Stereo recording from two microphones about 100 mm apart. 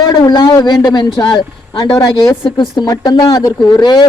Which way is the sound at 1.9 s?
35° left (ahead or behind).